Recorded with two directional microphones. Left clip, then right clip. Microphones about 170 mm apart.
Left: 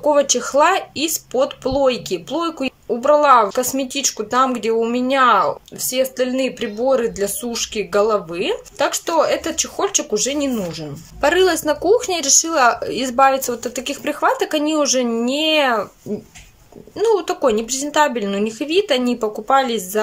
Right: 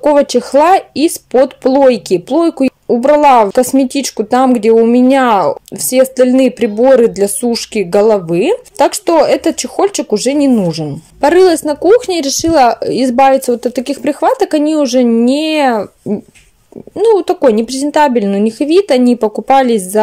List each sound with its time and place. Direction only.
0.0 s speech: 30° right (ahead or behind)
16.9 s speech: 25° right (ahead or behind)